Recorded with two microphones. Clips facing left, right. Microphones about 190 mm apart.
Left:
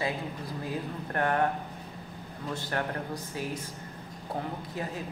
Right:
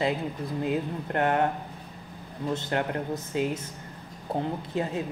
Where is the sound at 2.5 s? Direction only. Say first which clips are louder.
Right 4 dB; 20° right (ahead or behind).